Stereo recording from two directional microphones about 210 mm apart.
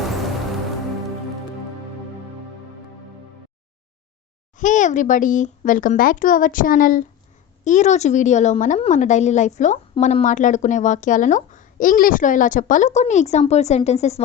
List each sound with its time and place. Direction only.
4.5 s speech: 35° left (ahead or behind)